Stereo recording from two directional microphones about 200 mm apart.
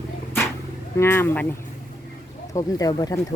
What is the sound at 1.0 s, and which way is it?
Speech, 10° left (ahead or behind).